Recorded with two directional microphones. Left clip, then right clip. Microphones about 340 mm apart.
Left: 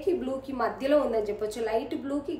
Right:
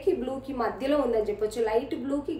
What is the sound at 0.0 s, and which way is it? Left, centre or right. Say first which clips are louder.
A woman's voice: right 1 dB; centre.